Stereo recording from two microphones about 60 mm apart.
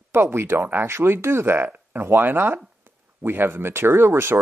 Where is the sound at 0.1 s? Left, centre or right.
Right.